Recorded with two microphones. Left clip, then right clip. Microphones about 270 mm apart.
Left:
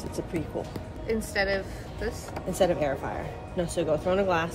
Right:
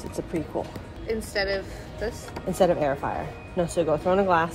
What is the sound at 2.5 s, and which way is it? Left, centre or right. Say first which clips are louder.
Speech: right 3 dB; centre.